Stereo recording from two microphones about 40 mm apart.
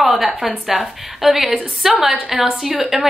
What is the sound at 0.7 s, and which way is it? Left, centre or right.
A woman's voice, centre.